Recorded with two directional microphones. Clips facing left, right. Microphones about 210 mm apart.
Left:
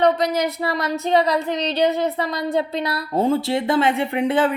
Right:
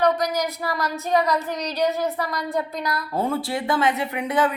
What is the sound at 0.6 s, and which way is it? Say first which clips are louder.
A woman's voice: left 4 dB; 25° left (ahead or behind).